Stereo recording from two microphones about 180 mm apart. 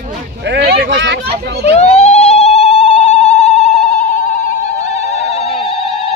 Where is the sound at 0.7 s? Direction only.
70° right (ahead or behind); by 1.1 s 85° right.